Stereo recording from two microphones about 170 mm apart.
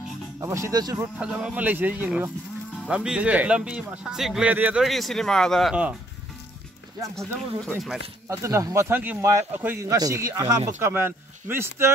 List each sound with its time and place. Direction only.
0.4 s speech: 15° right (ahead or behind)
1.0 s speech: 5° right (ahead or behind)
7.2 s speech: 5° left (ahead or behind)
8.3 s speech: 15° right (ahead or behind)